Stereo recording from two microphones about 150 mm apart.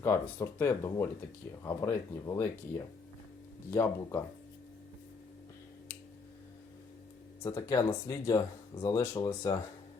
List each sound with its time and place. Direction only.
0.0 s speech: 15° left (ahead or behind)
7.4 s speech: 20° left (ahead or behind)